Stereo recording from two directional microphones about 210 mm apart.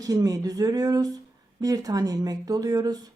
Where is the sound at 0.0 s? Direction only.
15° right (ahead or behind).